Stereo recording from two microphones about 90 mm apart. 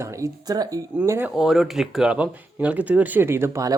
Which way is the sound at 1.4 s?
5° right (ahead or behind).